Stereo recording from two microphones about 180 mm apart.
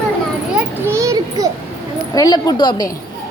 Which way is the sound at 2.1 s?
20° left (ahead or behind).